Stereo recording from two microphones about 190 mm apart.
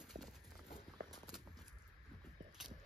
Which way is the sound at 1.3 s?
Centre (ahead or behind).